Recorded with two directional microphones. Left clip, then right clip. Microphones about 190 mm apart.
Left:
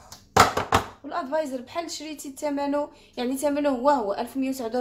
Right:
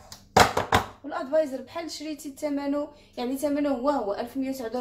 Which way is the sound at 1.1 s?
40° left (ahead or behind).